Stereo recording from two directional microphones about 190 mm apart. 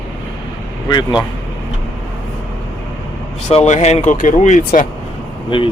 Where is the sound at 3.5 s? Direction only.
35° left (ahead or behind).